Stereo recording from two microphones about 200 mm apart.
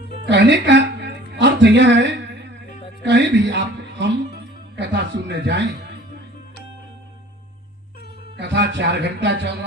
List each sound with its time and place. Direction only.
0.3 s music: 60° right (ahead or behind)
3.0 s speech: 60° right (ahead or behind)
8.4 s speech: 60° right (ahead or behind)